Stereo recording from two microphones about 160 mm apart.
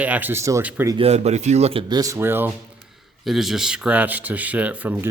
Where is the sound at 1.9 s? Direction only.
20° right (ahead or behind).